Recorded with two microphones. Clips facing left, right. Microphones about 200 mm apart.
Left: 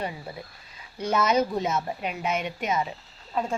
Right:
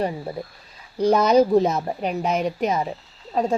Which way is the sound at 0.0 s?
40° right (ahead or behind).